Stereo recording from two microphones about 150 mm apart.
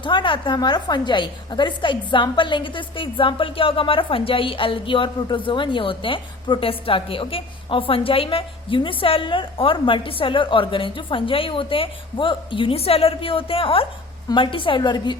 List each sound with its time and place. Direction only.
0.0 s a woman's voice: 30° left (ahead or behind)